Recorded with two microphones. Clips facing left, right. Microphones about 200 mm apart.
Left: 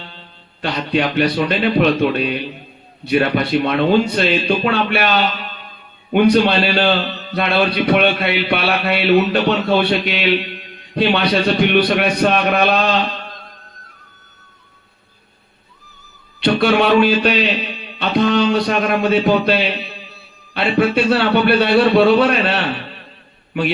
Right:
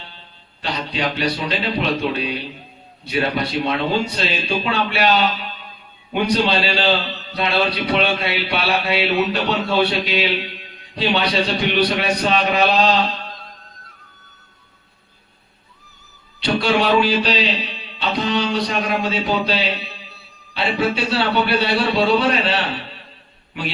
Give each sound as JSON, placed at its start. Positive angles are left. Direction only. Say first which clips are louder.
{"t": 0.6, "sound": "a man's voice", "louder": "left 5 dB", "side_deg": 55}
{"t": 16.4, "sound": "a man's voice", "louder": "left 4 dB", "side_deg": 60}